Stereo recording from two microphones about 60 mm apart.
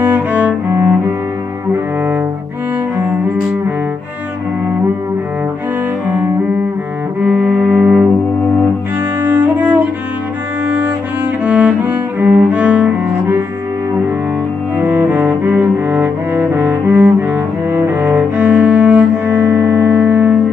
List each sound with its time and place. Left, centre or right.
0.0 s cello: right
7.2 s cello: right
9.3 s cello: right
11.4 s cello: right
14.8 s cello: right